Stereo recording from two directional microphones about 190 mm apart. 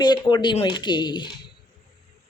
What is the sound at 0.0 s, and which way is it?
A woman's voice, 20° left (ahead or behind).